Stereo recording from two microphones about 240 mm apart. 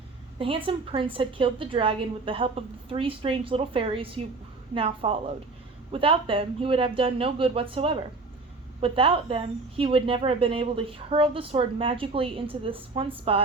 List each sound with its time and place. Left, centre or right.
0.3 s a woman's voice: right